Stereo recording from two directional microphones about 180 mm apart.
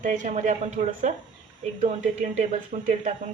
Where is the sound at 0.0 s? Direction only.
45° right (ahead or behind).